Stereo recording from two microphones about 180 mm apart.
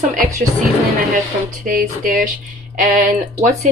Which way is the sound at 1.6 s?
50° right (ahead or behind).